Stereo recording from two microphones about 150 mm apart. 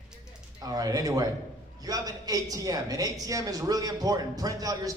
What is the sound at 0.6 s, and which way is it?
A man's voice, 25° right (ahead or behind).